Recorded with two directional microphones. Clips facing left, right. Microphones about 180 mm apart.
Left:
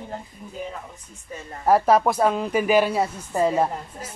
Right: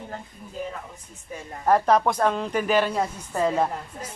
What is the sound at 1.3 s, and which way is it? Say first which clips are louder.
Speech: even; 10° right (ahead or behind).